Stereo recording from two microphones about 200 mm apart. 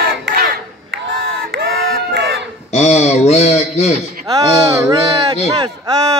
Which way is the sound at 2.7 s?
35° left (ahead or behind).